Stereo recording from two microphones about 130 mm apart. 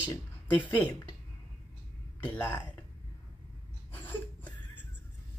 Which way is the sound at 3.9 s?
15° left (ahead or behind).